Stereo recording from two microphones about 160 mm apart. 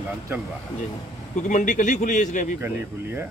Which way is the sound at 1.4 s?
50° left (ahead or behind).